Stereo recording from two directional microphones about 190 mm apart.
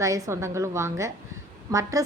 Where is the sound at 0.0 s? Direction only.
15° right (ahead or behind).